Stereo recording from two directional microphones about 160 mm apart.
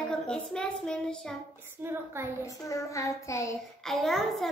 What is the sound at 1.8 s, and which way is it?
Speech, 15° right (ahead or behind).